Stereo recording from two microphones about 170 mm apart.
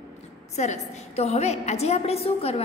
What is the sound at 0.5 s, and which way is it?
A woman's voice, 40° left (ahead or behind).